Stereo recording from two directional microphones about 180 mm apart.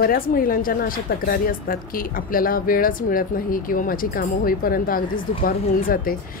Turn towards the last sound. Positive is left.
turn(degrees=55)  # may be behind; listen again after turning